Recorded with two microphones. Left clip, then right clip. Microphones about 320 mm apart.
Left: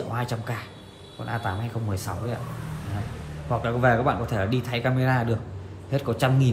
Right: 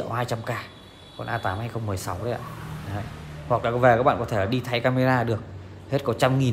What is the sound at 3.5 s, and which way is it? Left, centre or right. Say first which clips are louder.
Speech: right 3 dB; right.